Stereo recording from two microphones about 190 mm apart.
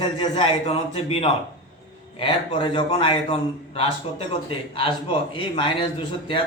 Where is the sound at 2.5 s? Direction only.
25° left (ahead or behind).